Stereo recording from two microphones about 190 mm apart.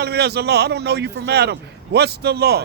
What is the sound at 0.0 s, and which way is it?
A man's voice, 60° right (ahead or behind).